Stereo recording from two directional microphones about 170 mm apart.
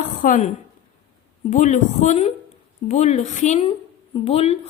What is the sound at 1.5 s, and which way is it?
A woman's voice, 45° left (ahead or behind).